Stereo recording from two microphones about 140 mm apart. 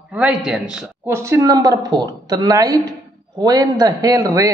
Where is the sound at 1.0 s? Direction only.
20° right (ahead or behind).